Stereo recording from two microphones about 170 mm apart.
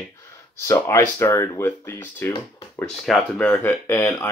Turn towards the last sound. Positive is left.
turn(degrees=15)  # may be behind; listen again after turning